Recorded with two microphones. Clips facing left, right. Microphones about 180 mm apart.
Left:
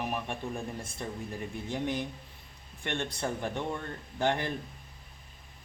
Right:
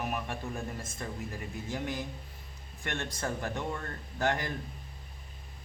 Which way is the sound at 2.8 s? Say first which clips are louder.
Left 2 dB; 15° left (ahead or behind).